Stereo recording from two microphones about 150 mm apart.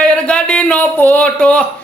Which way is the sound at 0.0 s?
5° left (ahead or behind).